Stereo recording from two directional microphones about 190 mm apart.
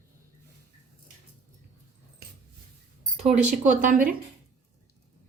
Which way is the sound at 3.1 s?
35° right (ahead or behind).